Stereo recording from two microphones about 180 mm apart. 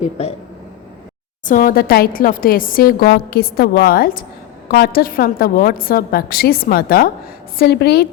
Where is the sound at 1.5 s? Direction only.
50° left (ahead or behind).